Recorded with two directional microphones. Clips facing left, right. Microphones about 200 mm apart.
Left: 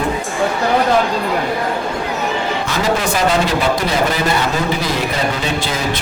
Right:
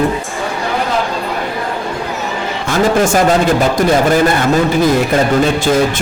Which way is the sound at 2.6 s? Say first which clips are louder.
Right 9 dB; 50° right (ahead or behind).